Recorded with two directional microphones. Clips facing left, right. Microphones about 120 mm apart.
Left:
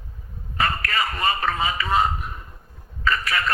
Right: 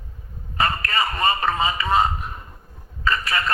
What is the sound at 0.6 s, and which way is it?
A man's voice, 30° right (ahead or behind).